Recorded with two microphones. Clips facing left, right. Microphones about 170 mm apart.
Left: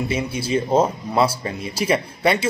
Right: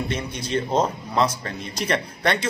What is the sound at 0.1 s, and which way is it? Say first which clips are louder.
A man's voice: left 4 dB; 5° left (ahead or behind).